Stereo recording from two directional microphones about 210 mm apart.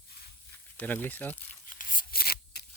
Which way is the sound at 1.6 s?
40° left (ahead or behind).